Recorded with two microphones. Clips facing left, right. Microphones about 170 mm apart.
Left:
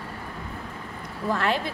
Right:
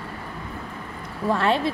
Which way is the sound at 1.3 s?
30° right (ahead or behind).